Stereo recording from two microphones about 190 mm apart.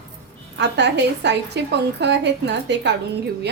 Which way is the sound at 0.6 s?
65° right (ahead or behind).